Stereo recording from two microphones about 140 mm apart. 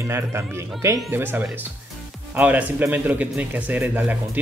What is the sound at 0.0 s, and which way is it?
A man's voice, 15° right (ahead or behind).